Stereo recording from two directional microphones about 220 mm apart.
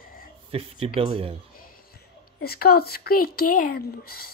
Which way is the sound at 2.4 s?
45° left (ahead or behind).